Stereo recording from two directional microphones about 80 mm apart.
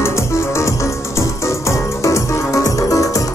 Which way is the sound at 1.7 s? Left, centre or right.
Left.